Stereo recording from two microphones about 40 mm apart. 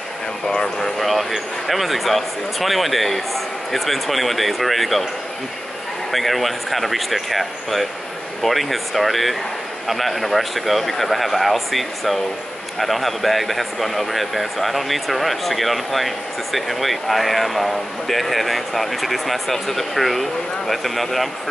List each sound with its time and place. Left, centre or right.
0.7 s speech: centre
6.1 s speech: centre